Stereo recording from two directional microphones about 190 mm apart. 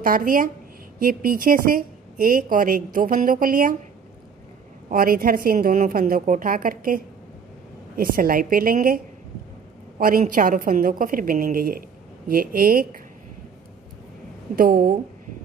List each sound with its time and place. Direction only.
0.0 s a woman's voice: 45° right (ahead or behind)
4.8 s a woman's voice: 50° right (ahead or behind)
14.5 s a woman's voice: 50° right (ahead or behind)